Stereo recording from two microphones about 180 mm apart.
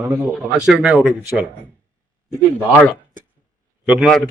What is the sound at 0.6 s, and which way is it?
Speech, 5° right (ahead or behind).